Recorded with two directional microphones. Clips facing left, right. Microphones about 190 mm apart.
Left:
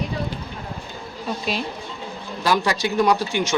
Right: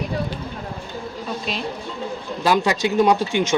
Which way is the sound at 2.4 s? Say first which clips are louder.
Right 2 dB; 20° right (ahead or behind).